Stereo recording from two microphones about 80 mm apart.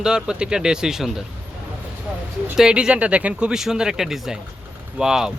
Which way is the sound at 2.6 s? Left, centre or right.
Centre.